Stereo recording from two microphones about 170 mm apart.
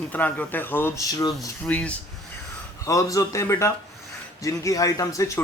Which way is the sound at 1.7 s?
5° left (ahead or behind).